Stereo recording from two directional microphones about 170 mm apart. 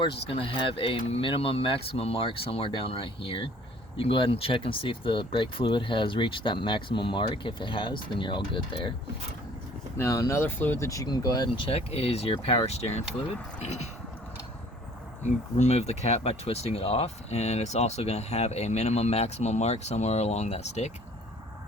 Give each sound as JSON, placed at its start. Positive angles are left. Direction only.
{"t": 0.0, "sound": "speech", "side_deg": 30}
{"t": 10.0, "sound": "speech", "side_deg": 15}
{"t": 15.2, "sound": "speech", "side_deg": 45}